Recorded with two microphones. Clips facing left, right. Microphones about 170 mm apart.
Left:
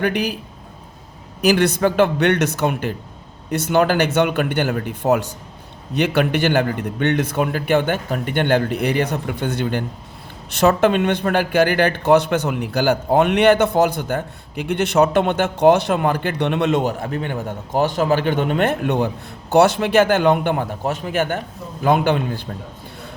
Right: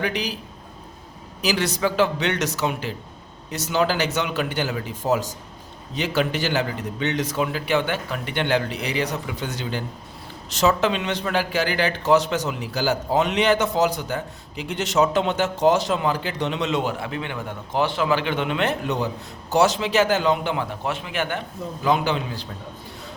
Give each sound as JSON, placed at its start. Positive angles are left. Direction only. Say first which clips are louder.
{"t": 0.0, "sound": "a man's voice", "louder": "left 6 dB", "side_deg": 55}
{"t": 1.4, "sound": "a man's voice", "louder": "left 7 dB", "side_deg": 55}